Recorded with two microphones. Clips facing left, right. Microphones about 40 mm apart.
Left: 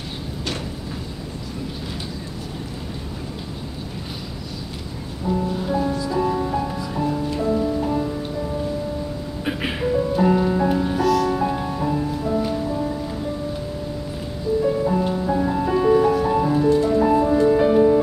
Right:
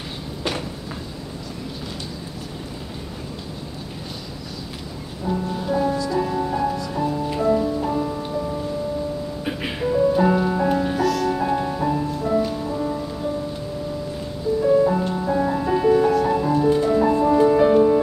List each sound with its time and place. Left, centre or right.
5.2 s music: centre
7.2 s music: centre
7.6 s music: centre
9.4 s music: centre
10.1 s music: centre
14.8 s music: centre
16.6 s music: centre
17.0 s music: centre